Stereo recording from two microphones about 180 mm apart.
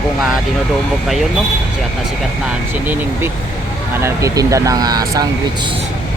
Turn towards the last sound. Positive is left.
turn(degrees=-20)  # may be behind; listen again after turning